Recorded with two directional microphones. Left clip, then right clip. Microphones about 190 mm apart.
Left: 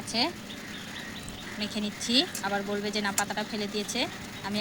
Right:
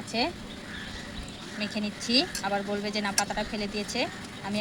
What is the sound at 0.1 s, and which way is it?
Speech, 25° right (ahead or behind).